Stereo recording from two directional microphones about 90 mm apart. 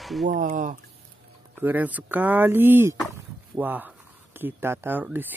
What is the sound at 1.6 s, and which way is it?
Speech, 20° right (ahead or behind).